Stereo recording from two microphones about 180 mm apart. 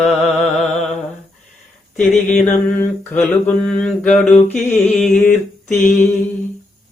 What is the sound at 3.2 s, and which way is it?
Mantra, 5° left (ahead or behind).